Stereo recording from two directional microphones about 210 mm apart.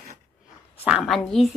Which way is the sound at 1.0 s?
Centre (ahead or behind).